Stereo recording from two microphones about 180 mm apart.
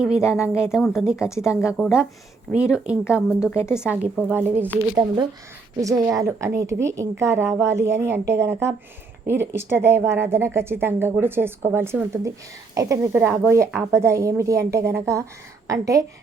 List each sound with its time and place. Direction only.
0.0 s speech: 5° right (ahead or behind)
1.1 s speech: 15° left (ahead or behind)
1.4 s a woman's voice: 5° right (ahead or behind)
4.8 s a woman's voice: 25° right (ahead or behind)